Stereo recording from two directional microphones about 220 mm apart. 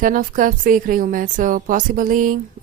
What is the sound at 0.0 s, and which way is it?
Speech, 40° right (ahead or behind).